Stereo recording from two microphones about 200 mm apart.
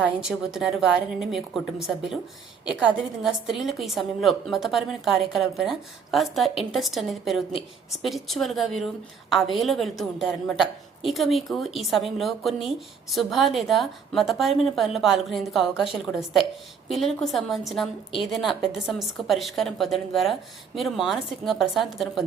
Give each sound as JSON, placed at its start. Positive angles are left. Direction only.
{"t": 0.0, "sound": "a woman's voice", "side_deg": -5}
{"t": 16.9, "sound": "a woman's voice", "side_deg": 0}